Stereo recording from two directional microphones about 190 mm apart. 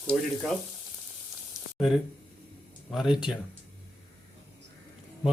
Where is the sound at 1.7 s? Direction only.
Centre (ahead or behind).